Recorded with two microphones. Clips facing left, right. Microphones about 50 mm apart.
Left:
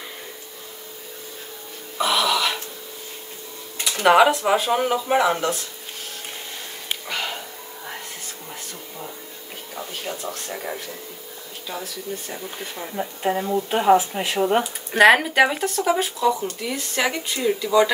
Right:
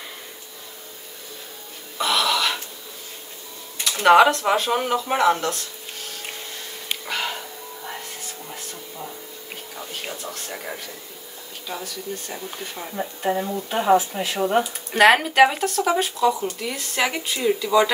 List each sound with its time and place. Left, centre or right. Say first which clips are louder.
2.0 s throat clearing: left 1 dB; centre
4.0 s speech: right 1 dB; centre
7.1 s music: right 1 dB; centre
10.3 s speech: left 2 dB; centre
13.2 s speech: left 2 dB; centre
14.6 s speech: even; centre